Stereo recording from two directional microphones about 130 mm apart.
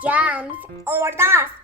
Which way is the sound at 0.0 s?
10° right (ahead or behind).